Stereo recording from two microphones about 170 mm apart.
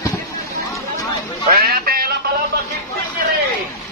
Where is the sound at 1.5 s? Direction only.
60° right (ahead or behind).